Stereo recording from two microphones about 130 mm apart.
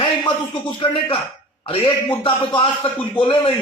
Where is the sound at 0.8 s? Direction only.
40° left (ahead or behind).